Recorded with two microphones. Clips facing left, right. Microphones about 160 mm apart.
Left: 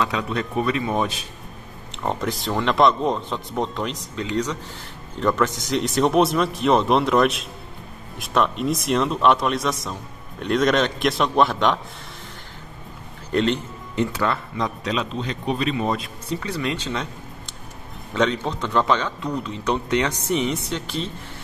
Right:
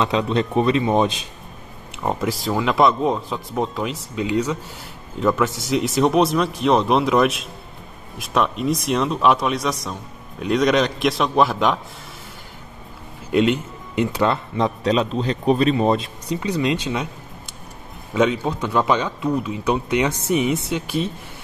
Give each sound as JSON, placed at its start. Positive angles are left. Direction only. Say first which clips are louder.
{"t": 0.0, "sound": "a man's voice", "louder": "right 4 dB", "side_deg": -25}
{"t": 1.9, "sound": "a man's voice", "louder": "right 2 dB", "side_deg": -5}
{"t": 13.3, "sound": "speech", "louder": "right 3 dB", "side_deg": -10}
{"t": 16.3, "sound": "a man's voice", "louder": "right 5 dB", "side_deg": -15}
{"t": 18.1, "sound": "a man's voice", "louder": "right 3 dB", "side_deg": -10}